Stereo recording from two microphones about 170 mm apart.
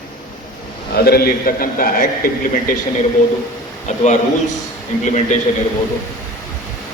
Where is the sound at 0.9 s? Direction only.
65° left (ahead or behind).